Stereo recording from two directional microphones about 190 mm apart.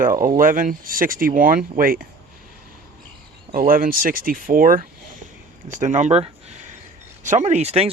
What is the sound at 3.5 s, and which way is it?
Speech, 50° right (ahead or behind).